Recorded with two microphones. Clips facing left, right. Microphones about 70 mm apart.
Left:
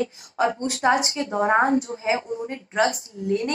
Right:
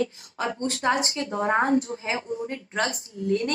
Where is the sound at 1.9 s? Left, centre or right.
Centre.